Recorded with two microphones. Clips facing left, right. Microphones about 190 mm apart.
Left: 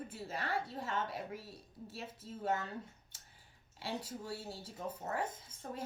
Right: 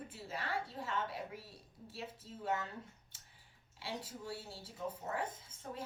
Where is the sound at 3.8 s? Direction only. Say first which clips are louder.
Left 3 dB; 40° left (ahead or behind).